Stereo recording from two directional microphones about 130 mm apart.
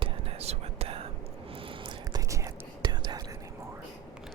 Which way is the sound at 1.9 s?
25° right (ahead or behind).